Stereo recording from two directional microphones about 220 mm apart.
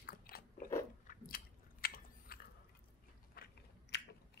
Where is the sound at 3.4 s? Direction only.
40° left (ahead or behind).